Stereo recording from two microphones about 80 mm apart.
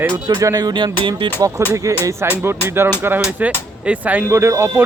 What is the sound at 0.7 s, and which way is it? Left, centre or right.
Music, right.